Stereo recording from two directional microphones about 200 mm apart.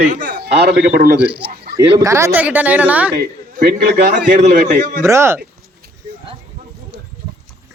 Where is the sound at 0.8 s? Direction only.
40° right (ahead or behind).